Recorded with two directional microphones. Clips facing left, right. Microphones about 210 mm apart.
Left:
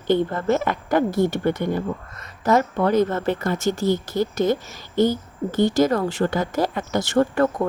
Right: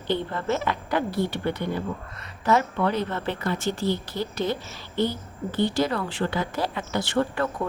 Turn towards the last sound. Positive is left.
turn(degrees=45)  # may be behind; listen again after turning